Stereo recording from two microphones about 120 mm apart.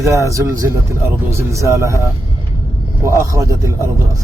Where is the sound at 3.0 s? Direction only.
25° right (ahead or behind).